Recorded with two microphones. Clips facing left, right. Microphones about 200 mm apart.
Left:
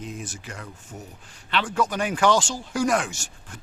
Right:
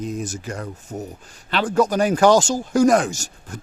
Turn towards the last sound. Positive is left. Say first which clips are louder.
# right 9 dB
turn(degrees=-40)  # may be behind; listen again after turning